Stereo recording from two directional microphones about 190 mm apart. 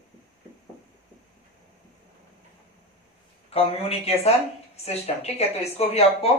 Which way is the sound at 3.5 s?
30° left (ahead or behind).